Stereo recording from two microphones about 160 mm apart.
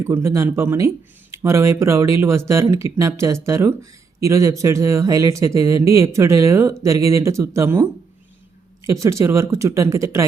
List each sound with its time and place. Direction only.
0.0 s speech: 15° right (ahead or behind)
8.9 s speech: 20° right (ahead or behind)